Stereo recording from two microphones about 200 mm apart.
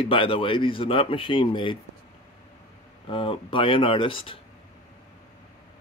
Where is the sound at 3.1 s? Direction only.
25° left (ahead or behind).